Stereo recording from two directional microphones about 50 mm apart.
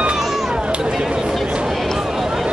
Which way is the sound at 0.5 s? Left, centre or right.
Centre.